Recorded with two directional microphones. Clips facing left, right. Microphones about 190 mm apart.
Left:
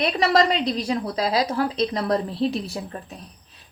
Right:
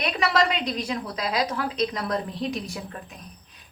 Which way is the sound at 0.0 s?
35° left (ahead or behind).